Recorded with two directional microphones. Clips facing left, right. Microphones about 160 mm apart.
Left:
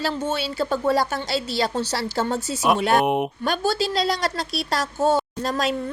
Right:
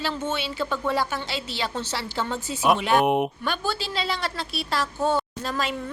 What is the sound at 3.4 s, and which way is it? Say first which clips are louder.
A woman's voice: left 6 dB; 40° left (ahead or behind).